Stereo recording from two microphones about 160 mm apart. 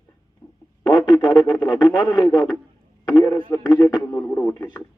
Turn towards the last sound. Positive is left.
turn(degrees=15)  # may be behind; listen again after turning